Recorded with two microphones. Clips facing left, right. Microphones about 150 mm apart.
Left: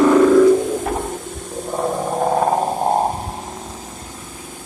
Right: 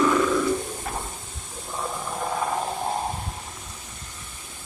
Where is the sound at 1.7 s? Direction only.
55° left (ahead or behind).